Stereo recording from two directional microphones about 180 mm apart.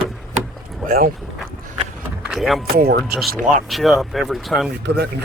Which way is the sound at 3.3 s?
50° right (ahead or behind).